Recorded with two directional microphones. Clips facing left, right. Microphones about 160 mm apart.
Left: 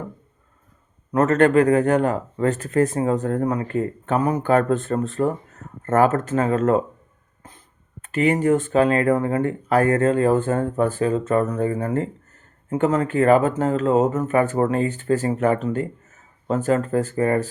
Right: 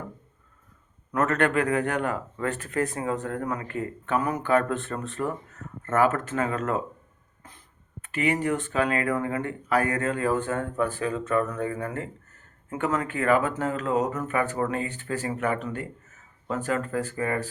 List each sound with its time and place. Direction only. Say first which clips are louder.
1.1 s speech: left 8 dB; 35° left (ahead or behind)
4.7 s speech: left 9 dB; 45° left (ahead or behind)
6.6 s speech: left 9 dB; 30° left (ahead or behind)
8.1 s speech: left 7 dB; 45° left (ahead or behind)
8.7 s speech: left 8 dB; 30° left (ahead or behind)
10.0 s speech: left 8 dB; 30° left (ahead or behind)
12.8 s speech: left 8 dB; 30° left (ahead or behind)
14.4 s speech: left 8 dB; 45° left (ahead or behind)
15.5 s speech: left 7 dB; 25° left (ahead or behind)
16.9 s speech: left 8 dB; 45° left (ahead or behind)